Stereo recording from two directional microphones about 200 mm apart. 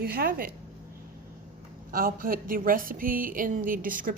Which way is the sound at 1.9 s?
45° right (ahead or behind).